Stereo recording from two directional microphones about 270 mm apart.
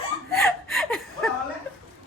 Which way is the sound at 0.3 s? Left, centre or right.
Centre.